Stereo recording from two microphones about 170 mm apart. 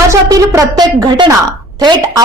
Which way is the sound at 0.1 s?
20° right (ahead or behind).